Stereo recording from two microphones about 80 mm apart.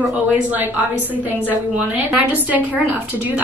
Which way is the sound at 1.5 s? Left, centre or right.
Right.